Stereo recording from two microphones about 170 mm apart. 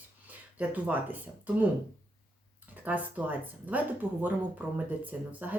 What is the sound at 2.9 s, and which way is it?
Speech, 10° right (ahead or behind).